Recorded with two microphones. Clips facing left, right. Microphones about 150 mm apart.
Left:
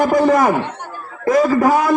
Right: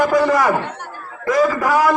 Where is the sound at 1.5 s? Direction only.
30° left (ahead or behind).